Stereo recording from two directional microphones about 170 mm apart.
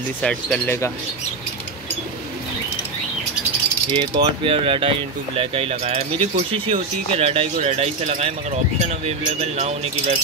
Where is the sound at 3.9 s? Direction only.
30° right (ahead or behind).